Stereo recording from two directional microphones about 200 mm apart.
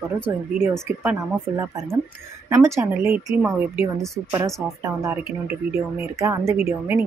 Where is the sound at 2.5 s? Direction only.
15° right (ahead or behind).